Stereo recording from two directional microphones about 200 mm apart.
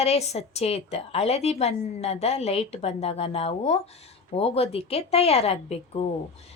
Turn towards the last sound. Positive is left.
turn(degrees=30)  # may be behind; listen again after turning